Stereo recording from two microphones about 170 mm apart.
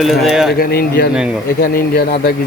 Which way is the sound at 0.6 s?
65° left (ahead or behind).